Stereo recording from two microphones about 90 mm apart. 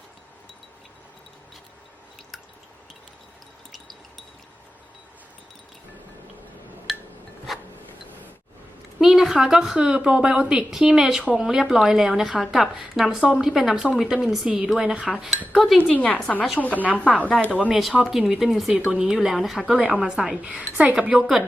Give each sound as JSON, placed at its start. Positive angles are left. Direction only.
{"t": 7.5, "sound": "a sound", "side_deg": 0}
{"t": 9.0, "sound": "a woman's voice", "side_deg": -5}
{"t": 15.9, "sound": "a woman's voice", "side_deg": 15}
{"t": 17.7, "sound": "a woman's voice", "side_deg": -5}